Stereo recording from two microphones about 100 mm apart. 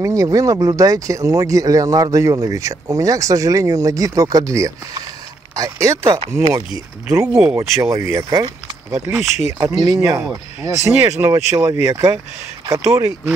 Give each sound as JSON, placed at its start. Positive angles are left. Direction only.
{"t": 0.0, "sound": "speech", "side_deg": -35}
{"t": 9.6, "sound": "speech", "side_deg": -40}